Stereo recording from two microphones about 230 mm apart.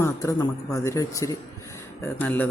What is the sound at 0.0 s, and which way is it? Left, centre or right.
A man's voice, centre.